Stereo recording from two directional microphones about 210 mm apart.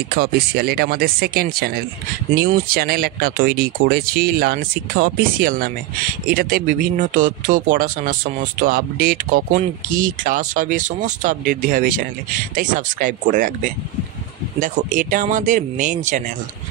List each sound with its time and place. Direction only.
0.1 s speech: 45° right (ahead or behind)
14.9 s speech: 40° right (ahead or behind)